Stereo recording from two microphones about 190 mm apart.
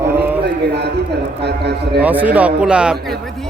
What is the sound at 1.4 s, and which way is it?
Speech, 60° right (ahead or behind).